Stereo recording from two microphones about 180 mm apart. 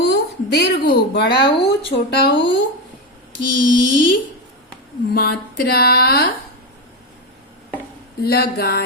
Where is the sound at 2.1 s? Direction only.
70° left (ahead or behind).